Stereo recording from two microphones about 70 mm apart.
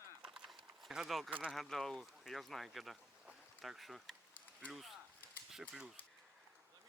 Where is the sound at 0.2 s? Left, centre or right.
Centre.